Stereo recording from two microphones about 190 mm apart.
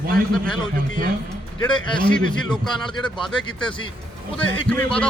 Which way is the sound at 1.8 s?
25° left (ahead or behind).